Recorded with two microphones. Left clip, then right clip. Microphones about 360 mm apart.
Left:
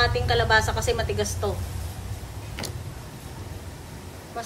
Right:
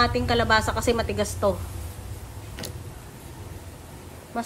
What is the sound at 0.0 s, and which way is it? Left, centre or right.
A woman's voice, right.